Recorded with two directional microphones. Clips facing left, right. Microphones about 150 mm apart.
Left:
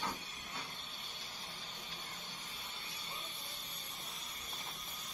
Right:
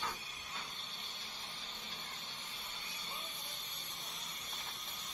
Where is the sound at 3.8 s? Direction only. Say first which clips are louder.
Even; 30° left (ahead or behind).